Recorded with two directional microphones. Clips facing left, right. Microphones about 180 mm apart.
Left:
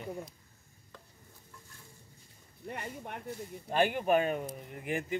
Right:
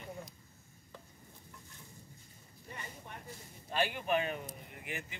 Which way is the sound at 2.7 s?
65° left (ahead or behind).